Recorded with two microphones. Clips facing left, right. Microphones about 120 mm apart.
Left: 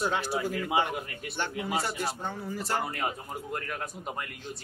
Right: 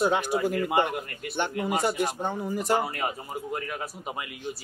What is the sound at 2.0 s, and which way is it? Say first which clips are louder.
Speech: right 5 dB; 15° right (ahead or behind).